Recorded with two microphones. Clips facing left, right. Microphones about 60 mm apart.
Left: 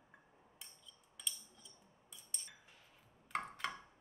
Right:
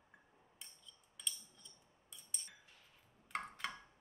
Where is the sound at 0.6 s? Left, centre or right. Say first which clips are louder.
Even; centre.